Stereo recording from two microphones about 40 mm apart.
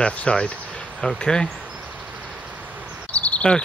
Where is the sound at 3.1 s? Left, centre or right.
Left.